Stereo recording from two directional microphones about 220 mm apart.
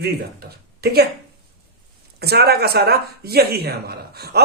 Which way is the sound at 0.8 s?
45° right (ahead or behind).